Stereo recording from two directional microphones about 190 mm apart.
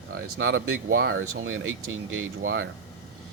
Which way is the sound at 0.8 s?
50° right (ahead or behind).